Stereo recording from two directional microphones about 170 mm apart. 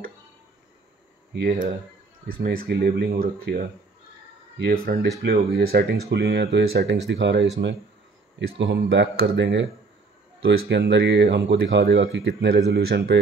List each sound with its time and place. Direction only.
1.3 s speech: 60° right (ahead or behind)
4.6 s speech: 65° right (ahead or behind)
6.0 s speech: 85° right